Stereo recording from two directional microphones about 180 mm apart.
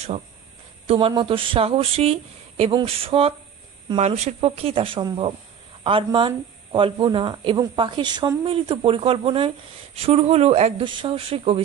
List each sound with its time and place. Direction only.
0.8 s speech: 30° right (ahead or behind)